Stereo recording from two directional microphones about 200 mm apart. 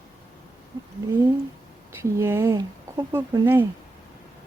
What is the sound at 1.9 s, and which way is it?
Speech, 15° right (ahead or behind).